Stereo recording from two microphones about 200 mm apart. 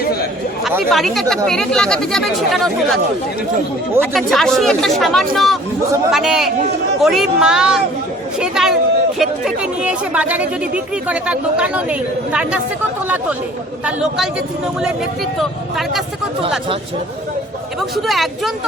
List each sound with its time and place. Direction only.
0.0 s chatter: 50° left (ahead or behind)
0.9 s speech: centre (ahead or behind)
4.1 s a woman's voice: centre (ahead or behind)
13.8 s speech: 5° right (ahead or behind)
15.4 s speech: centre (ahead or behind)
17.7 s speech: centre (ahead or behind)